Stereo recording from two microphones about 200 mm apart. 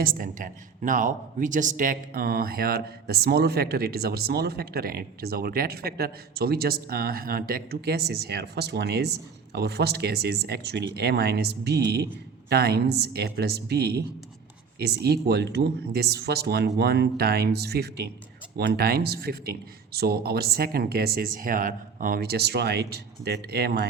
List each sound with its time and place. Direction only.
0.0 s a man's voice: 45° right (ahead or behind)